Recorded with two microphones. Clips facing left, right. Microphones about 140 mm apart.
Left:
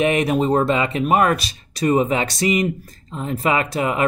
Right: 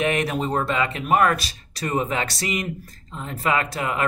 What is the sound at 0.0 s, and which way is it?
Speech, 15° left (ahead or behind).